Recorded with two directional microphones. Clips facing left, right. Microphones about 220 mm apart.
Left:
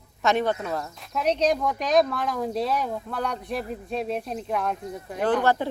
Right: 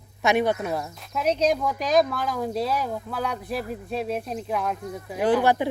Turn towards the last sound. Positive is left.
turn(degrees=-10)  # may be behind; listen again after turning